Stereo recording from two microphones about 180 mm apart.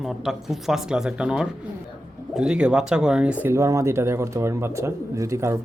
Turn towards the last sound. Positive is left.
turn(degrees=-15)  # may be behind; listen again after turning